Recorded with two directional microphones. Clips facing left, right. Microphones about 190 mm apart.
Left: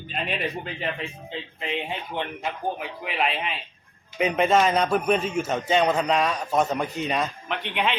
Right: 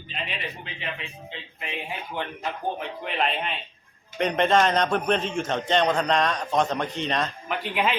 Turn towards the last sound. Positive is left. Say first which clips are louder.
# right 1 dB
turn(degrees=-5)  # may be behind; listen again after turning